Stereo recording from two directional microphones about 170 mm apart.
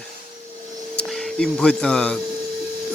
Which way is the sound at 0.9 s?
5° left (ahead or behind).